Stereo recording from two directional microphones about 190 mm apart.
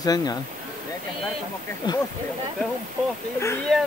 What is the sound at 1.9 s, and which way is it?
Speech, 25° left (ahead or behind).